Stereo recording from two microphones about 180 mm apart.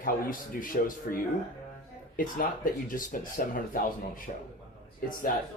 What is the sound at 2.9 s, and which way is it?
A man's voice, 50° left (ahead or behind).